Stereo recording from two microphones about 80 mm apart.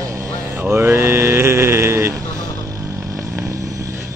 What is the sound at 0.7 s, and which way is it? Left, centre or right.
Sheep, right.